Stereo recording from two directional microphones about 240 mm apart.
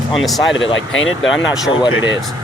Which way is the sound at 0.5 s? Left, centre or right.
Left.